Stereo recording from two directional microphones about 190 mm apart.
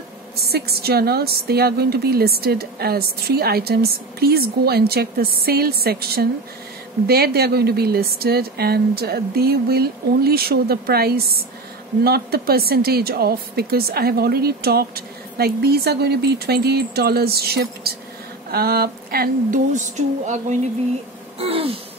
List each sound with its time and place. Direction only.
0.5 s speech: 55° right (ahead or behind); by 20.5 s 40° right (ahead or behind)
21.4 s gasp: 30° right (ahead or behind)